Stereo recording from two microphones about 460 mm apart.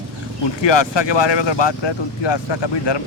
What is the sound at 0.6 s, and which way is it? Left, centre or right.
Speech, left.